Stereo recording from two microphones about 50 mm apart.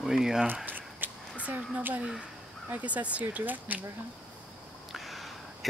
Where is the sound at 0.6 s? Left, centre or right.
Right.